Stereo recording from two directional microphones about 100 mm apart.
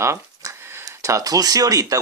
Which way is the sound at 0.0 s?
30° right (ahead or behind).